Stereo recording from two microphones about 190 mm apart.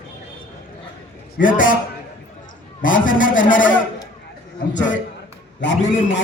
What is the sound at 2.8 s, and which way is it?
Speech, 45° left (ahead or behind).